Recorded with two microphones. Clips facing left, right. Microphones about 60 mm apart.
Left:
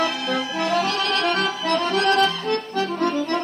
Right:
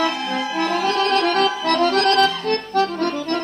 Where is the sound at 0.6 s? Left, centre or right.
Right.